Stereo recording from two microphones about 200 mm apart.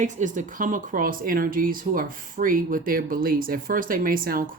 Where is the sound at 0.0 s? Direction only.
40° right (ahead or behind).